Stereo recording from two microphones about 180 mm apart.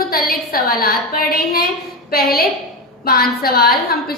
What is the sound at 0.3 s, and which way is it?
A woman's voice, 55° left (ahead or behind).